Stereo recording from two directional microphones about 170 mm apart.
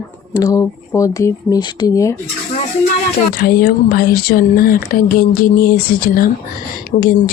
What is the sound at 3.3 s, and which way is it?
Speech, 60° left (ahead or behind).